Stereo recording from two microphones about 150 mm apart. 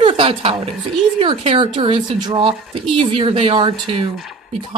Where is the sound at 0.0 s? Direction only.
40° right (ahead or behind).